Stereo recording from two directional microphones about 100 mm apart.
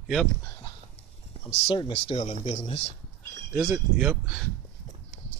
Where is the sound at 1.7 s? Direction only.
55° left (ahead or behind).